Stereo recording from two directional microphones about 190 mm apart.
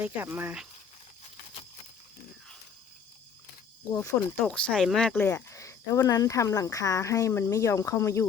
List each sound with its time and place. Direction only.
0.0 s speech: 10° right (ahead or behind)
3.8 s speech: 15° left (ahead or behind)